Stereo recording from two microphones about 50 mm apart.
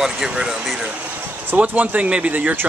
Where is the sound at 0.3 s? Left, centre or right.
Centre.